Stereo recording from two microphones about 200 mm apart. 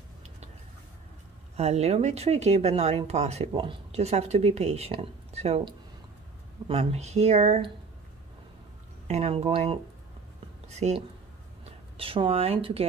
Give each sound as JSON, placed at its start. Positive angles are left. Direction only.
{"t": 1.6, "sound": "speech", "side_deg": -30}
{"t": 9.0, "sound": "speech", "side_deg": -30}